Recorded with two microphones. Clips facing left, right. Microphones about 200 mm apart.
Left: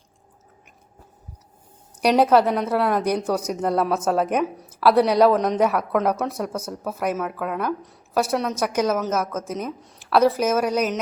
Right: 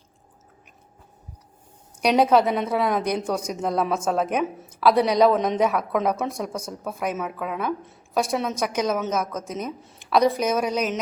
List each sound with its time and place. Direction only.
2.0 s a woman's voice: 5° left (ahead or behind)